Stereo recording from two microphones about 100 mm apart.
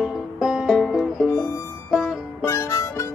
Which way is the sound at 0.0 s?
5° right (ahead or behind).